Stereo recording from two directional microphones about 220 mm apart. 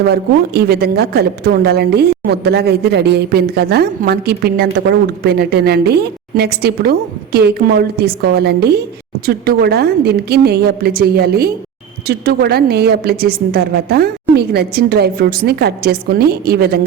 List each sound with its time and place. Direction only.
0.1 s speech: 45° right (ahead or behind)